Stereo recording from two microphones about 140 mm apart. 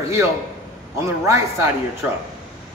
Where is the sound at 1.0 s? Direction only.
20° right (ahead or behind).